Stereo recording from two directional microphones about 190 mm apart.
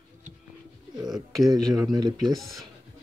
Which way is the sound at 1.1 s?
Centre (ahead or behind).